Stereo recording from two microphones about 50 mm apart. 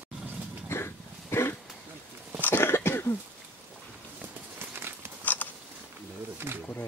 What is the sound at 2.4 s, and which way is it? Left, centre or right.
Cough, left.